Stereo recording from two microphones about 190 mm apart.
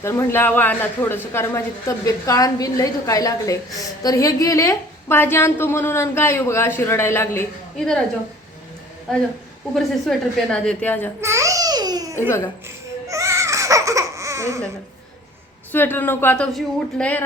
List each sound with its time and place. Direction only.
0.0 s speech: 15° left (ahead or behind)
9.7 s a woman's voice: centre (ahead or behind)
11.2 s babbling: 15° right (ahead or behind)
12.6 s a sound: 15° right (ahead or behind)
15.7 s speech: 10° left (ahead or behind)